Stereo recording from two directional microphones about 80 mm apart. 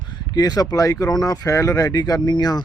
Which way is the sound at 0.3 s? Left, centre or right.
Left.